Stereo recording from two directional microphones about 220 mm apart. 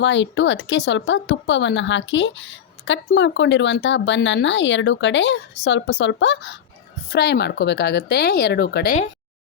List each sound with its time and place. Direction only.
0.0 s speech: 55° left (ahead or behind)